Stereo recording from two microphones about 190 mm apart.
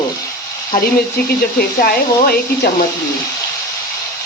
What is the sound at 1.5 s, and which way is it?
Speech, 50° left (ahead or behind).